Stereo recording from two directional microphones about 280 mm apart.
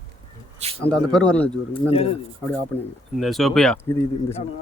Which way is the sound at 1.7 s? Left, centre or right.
Left.